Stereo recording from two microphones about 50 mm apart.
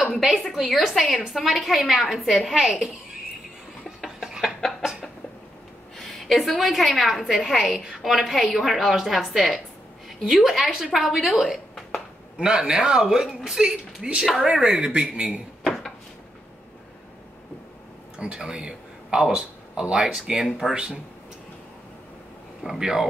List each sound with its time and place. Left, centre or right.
0.0 s a woman's voice: centre
2.5 s a man's voice: centre
5.9 s a woman's voice: centre
12.4 s a man's voice: centre
18.2 s a man's voice: centre
22.6 s speech: centre